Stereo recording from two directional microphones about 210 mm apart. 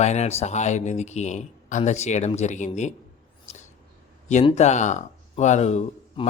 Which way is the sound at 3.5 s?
30° left (ahead or behind).